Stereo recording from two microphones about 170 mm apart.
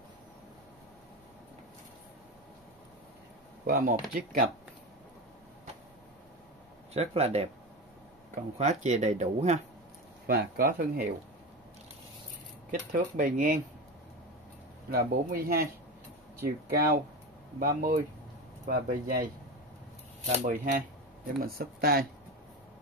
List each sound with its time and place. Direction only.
3.6 s speech: 60° right (ahead or behind)
6.9 s speech: 40° right (ahead or behind)
8.5 s speech: 45° right (ahead or behind)
10.2 s speech: 60° right (ahead or behind)
12.7 s speech: 50° right (ahead or behind)
14.9 s speech: 60° right (ahead or behind)
20.4 s speech: 50° right (ahead or behind)
21.4 s speech: 65° right (ahead or behind)